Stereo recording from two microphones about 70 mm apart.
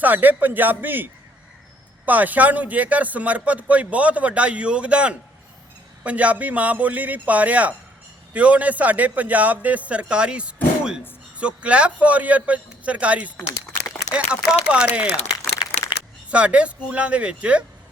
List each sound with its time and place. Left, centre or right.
0.0 s speech: right
2.0 s speech: right
15.5 s a sound: left
16.3 s speech: centre